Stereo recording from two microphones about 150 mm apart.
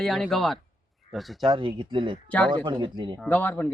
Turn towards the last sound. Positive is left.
turn(degrees=10)  # may be behind; listen again after turning